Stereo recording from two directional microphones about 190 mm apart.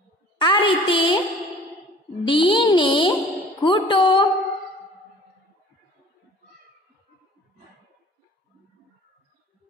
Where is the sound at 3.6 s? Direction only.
25° left (ahead or behind).